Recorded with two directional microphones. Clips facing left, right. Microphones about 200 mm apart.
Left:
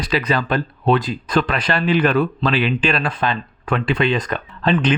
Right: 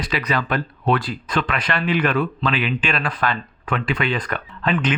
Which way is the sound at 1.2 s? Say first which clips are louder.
Left 4 dB; 35° left (ahead or behind).